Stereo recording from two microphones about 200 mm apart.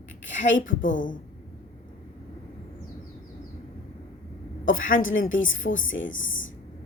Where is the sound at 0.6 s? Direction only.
40° left (ahead or behind).